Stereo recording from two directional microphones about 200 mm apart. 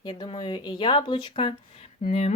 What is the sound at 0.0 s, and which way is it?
Speech, 20° left (ahead or behind).